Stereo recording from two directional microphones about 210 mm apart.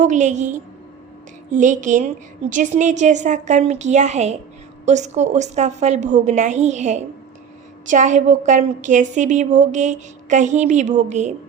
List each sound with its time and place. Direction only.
0.0 s a woman's voice: 35° right (ahead or behind)